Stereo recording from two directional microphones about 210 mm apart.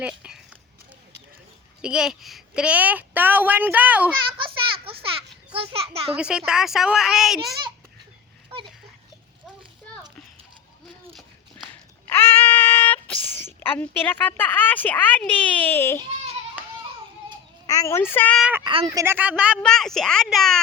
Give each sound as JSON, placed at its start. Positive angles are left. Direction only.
{"t": 0.0, "sound": "speech", "side_deg": -5}
{"t": 1.8, "sound": "a woman's voice", "side_deg": -5}
{"t": 4.4, "sound": "a sound", "side_deg": -25}
{"t": 5.7, "sound": "a child's voice", "side_deg": -30}
{"t": 6.1, "sound": "speech", "side_deg": -5}
{"t": 11.1, "sound": "a sound", "side_deg": 0}
{"t": 12.0, "sound": "speech", "side_deg": 10}
{"t": 17.7, "sound": "speech", "side_deg": 15}
{"t": 18.6, "sound": "speech", "side_deg": -25}
{"t": 18.9, "sound": "speech", "side_deg": -10}